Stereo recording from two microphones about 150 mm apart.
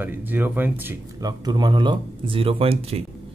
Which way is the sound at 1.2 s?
25° right (ahead or behind).